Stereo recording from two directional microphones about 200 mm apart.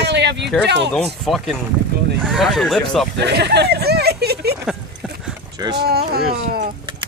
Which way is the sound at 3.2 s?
55° right (ahead or behind).